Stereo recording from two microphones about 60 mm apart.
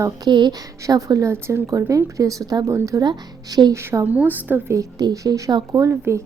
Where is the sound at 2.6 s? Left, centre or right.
Right.